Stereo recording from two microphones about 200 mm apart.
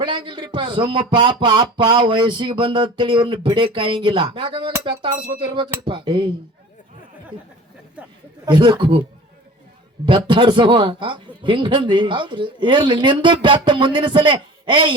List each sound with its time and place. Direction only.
0.0 s a man's voice: 25° right (ahead or behind)
8.4 s a man's voice: 20° right (ahead or behind)
10.1 s a man's voice: 25° right (ahead or behind)